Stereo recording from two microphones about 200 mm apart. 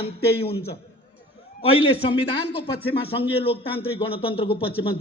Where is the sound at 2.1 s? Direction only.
25° left (ahead or behind).